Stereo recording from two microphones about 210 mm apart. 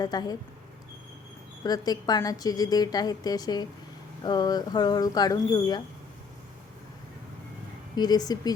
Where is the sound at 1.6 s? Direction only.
20° left (ahead or behind).